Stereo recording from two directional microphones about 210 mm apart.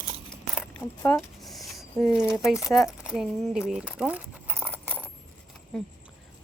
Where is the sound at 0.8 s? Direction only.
10° left (ahead or behind).